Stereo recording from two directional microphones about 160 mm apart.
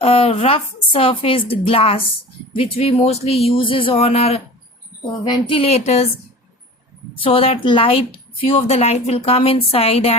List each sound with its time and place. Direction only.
0.0 s a woman's voice: 35° left (ahead or behind)
5.2 s a woman's voice: 30° left (ahead or behind)
7.2 s a woman's voice: 35° left (ahead or behind)